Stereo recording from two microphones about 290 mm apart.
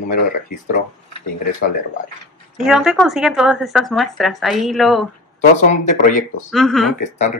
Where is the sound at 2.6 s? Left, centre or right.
Centre.